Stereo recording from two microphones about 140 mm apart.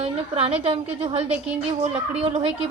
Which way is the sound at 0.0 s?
45° right (ahead or behind).